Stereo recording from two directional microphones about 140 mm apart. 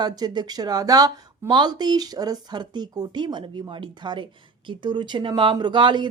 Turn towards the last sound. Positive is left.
turn(degrees=-35)  # may be behind; listen again after turning